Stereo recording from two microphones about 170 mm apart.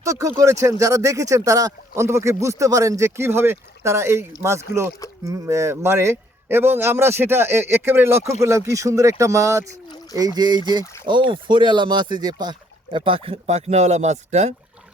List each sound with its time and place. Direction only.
0.0 s speech: 20° right (ahead or behind); by 14.5 s 40° right (ahead or behind)